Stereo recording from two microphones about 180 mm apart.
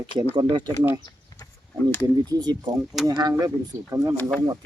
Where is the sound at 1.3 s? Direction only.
20° left (ahead or behind).